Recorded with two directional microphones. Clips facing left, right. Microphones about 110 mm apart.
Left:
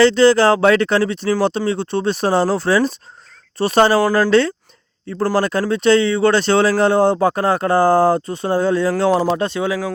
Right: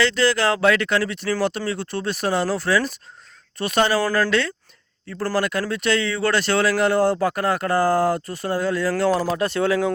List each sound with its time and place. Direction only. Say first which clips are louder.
0.0 s speech: left 8 dB; 30° left (ahead or behind)
4.0 s speech: left 5 dB; 20° left (ahead or behind)
4.3 s speech: left 8 dB; 30° left (ahead or behind)
5.0 s speech: left 6 dB; 20° left (ahead or behind)
5.4 s speech: left 3 dB; 30° left (ahead or behind)
8.9 s speech: left 4 dB; 15° left (ahead or behind)